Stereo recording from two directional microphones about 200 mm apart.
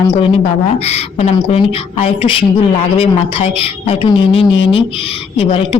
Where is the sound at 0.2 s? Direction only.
30° left (ahead or behind).